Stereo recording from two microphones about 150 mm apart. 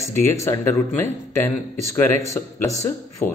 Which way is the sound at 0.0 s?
15° left (ahead or behind).